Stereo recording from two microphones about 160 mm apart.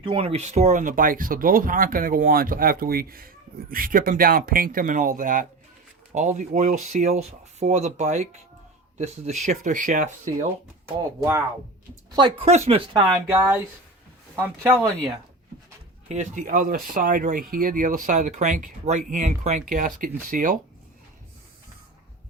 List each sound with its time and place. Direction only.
0.0 s speech: 35° right (ahead or behind)
9.5 s speech: 55° right (ahead or behind)
11.2 s speech: 20° right (ahead or behind)
12.1 s speech: 35° right (ahead or behind)
13.2 s speech: 10° right (ahead or behind)
16.0 s speech: 50° right (ahead or behind)